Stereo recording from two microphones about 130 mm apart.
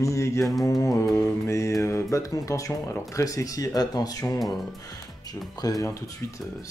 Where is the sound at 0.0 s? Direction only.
20° left (ahead or behind).